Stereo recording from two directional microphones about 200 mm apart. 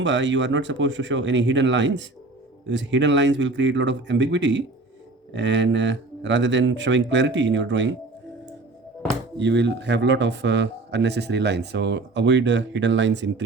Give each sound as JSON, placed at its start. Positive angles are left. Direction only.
{"t": 0.0, "sound": "speech", "side_deg": -65}
{"t": 9.4, "sound": "speech", "side_deg": -60}